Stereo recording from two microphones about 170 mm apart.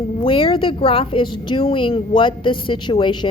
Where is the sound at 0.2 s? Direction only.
30° left (ahead or behind).